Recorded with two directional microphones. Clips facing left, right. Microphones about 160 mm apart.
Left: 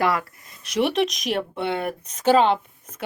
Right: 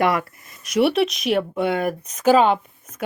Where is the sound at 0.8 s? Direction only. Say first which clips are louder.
Right 3 dB; 5° right (ahead or behind).